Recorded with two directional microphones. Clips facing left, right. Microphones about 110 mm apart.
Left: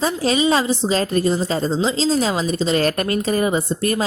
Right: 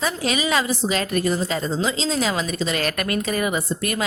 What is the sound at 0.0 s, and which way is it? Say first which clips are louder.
Speech: left 5 dB; 30° left (ahead or behind).